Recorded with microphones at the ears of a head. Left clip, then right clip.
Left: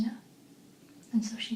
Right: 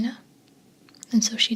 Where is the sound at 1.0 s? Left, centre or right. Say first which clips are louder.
Right 12 dB; right.